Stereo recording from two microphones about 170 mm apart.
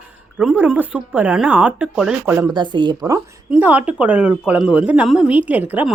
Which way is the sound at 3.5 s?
10° right (ahead or behind).